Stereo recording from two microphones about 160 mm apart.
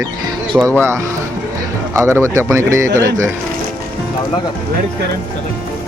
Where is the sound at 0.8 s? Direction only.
15° right (ahead or behind).